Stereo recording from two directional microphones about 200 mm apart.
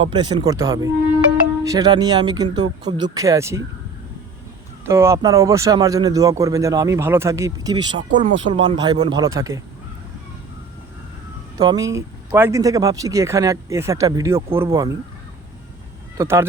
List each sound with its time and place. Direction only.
0.0 s speech: 25° right (ahead or behind)
4.9 s speech: 15° right (ahead or behind)
11.5 s speech: 15° right (ahead or behind)
16.1 s speech: 10° right (ahead or behind)